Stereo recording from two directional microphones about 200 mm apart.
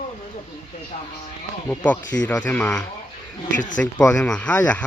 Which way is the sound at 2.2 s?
5° left (ahead or behind).